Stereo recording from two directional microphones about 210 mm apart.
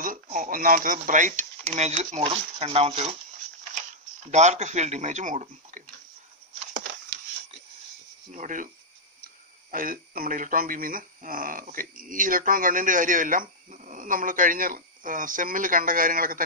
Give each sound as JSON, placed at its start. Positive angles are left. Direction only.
{"t": 0.0, "sound": "speech", "side_deg": -40}
{"t": 4.3, "sound": "speech", "side_deg": -35}
{"t": 8.3, "sound": "speech", "side_deg": -35}